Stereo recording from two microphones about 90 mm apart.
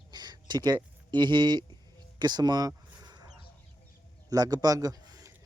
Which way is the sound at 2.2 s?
50° right (ahead or behind).